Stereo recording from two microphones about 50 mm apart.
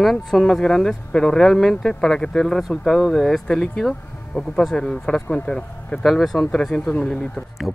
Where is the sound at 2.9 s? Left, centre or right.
Centre.